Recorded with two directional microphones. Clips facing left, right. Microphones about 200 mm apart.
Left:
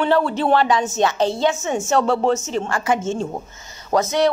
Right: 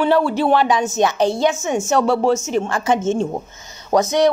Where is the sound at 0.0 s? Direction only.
10° right (ahead or behind).